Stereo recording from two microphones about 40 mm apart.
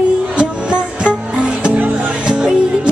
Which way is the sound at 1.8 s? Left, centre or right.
Right.